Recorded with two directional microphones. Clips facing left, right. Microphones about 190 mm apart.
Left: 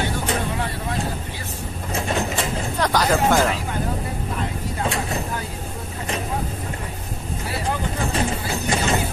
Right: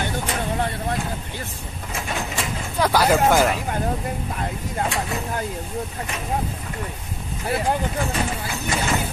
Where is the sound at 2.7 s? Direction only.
10° right (ahead or behind).